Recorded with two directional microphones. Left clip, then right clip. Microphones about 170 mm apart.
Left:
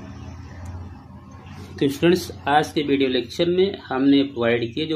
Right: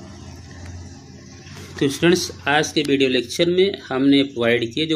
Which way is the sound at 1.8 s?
10° right (ahead or behind).